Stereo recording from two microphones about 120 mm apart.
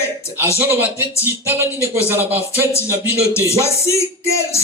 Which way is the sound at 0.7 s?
15° right (ahead or behind).